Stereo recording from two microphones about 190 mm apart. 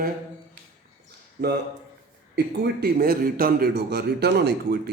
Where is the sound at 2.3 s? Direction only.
60° right (ahead or behind).